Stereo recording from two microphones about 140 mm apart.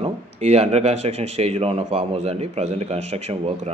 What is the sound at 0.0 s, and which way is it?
A man's voice, 45° right (ahead or behind).